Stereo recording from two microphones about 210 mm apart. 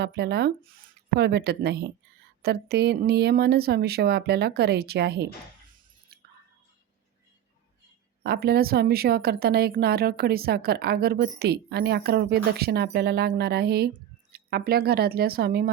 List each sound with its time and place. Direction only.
0.0 s a woman's voice: 50° right (ahead or behind)
8.2 s a woman's voice: 50° right (ahead or behind)